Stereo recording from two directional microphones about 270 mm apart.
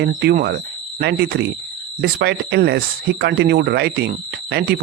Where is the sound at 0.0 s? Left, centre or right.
Right.